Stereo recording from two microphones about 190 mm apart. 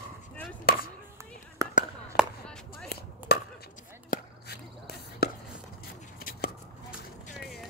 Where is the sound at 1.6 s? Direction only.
15° right (ahead or behind).